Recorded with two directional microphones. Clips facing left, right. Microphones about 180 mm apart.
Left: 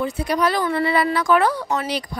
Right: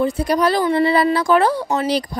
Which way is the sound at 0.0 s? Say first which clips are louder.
Right 4 dB; 35° right (ahead or behind).